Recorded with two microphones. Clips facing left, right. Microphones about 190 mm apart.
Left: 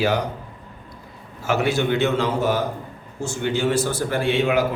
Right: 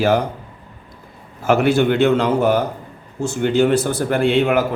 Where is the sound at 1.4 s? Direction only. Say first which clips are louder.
Right 6 dB; 55° right (ahead or behind).